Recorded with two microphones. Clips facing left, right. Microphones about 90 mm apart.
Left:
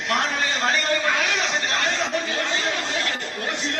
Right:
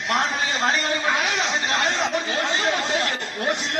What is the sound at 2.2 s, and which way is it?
Speech, 25° right (ahead or behind).